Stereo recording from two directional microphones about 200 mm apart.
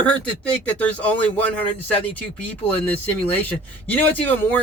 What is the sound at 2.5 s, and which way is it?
Speech, 10° left (ahead or behind).